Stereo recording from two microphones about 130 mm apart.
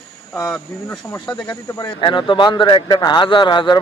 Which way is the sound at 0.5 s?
5° left (ahead or behind).